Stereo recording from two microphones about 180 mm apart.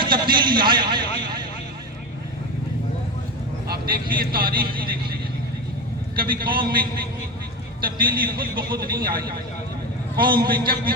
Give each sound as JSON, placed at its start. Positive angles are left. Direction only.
{"t": 0.0, "sound": "a sound", "side_deg": -25}
{"t": 3.7, "sound": "speech", "side_deg": -55}
{"t": 6.1, "sound": "a man's voice", "side_deg": -55}